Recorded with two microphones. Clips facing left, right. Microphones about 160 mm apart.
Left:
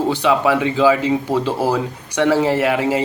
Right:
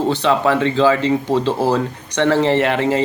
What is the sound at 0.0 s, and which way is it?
A man's voice, 10° left (ahead or behind).